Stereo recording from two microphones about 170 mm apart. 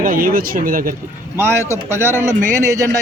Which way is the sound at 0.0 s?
55° right (ahead or behind).